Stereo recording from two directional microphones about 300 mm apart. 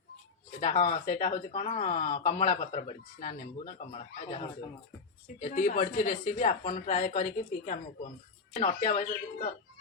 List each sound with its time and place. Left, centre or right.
0.6 s speech: left